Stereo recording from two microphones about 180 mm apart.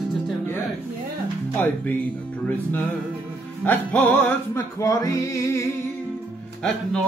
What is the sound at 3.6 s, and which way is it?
Music, 10° left (ahead or behind).